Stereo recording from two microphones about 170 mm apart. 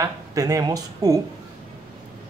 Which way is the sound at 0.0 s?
20° right (ahead or behind).